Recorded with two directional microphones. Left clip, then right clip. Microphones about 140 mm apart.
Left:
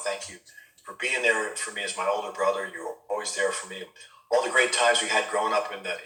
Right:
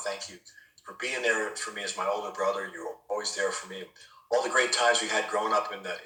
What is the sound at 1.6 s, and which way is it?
A man's voice, 30° right (ahead or behind).